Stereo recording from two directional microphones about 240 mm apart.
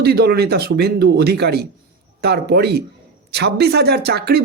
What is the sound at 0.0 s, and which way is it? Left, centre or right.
Speech, right.